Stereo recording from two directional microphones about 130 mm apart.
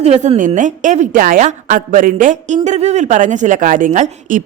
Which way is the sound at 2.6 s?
60° right (ahead or behind).